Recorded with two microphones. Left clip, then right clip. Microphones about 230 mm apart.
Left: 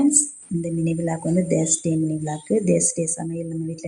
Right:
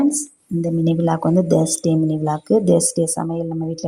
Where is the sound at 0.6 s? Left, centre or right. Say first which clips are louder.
Right 6 dB; centre.